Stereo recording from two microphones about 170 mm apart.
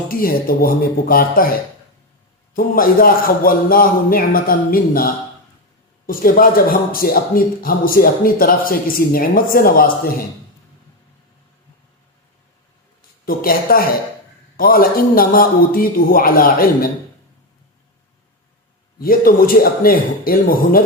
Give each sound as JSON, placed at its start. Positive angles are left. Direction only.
{"t": 0.1, "sound": "speech", "side_deg": 60}
{"t": 2.6, "sound": "speech", "side_deg": 60}
{"t": 13.0, "sound": "speech", "side_deg": 60}
{"t": 18.9, "sound": "speech", "side_deg": 60}